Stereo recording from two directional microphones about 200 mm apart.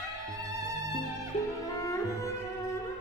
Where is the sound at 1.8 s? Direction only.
15° left (ahead or behind).